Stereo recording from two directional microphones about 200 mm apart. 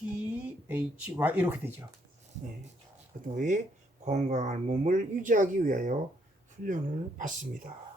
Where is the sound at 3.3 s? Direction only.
40° right (ahead or behind).